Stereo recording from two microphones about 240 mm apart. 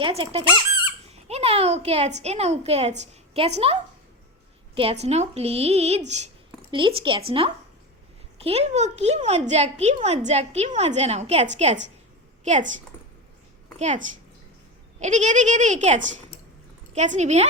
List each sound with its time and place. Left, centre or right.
0.0 s speech: right
1.3 s a sound: right
2.2 s speech: right
13.7 s a woman's voice: right